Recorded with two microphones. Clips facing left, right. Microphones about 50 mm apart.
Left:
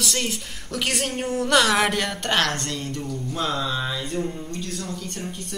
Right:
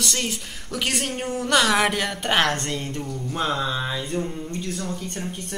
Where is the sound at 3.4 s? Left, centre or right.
Right.